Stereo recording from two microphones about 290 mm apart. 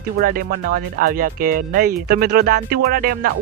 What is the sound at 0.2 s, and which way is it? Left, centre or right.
Speech, right.